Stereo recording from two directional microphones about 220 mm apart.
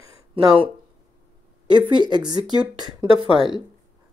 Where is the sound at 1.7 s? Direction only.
20° right (ahead or behind).